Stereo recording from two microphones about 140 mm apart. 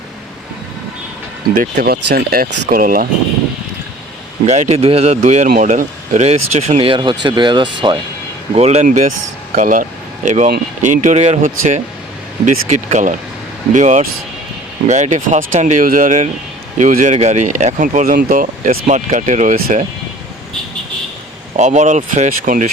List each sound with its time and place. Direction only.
1.5 s speech: 90° right
4.4 s speech: 50° right (ahead or behind)
5.5 s speech: 70° right (ahead or behind); by 7.9 s 35° right (ahead or behind)
8.5 s speech: 50° right (ahead or behind); by 9.8 s 70° right (ahead or behind)
10.2 s speech: 60° right (ahead or behind); by 19.8 s 75° right (ahead or behind)
21.5 s speech: 55° right (ahead or behind)